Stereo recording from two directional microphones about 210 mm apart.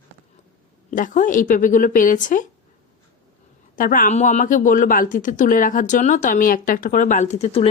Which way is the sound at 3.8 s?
40° left (ahead or behind).